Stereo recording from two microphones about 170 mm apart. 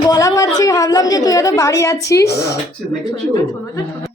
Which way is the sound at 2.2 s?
75° left (ahead or behind).